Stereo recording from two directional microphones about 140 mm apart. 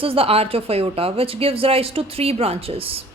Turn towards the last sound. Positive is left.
turn(degrees=-45)  # may be behind; listen again after turning